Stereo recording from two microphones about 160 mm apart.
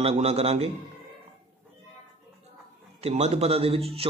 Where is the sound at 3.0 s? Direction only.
40° right (ahead or behind).